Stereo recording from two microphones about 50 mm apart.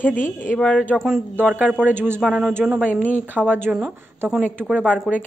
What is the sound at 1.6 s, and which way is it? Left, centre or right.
Speech, right.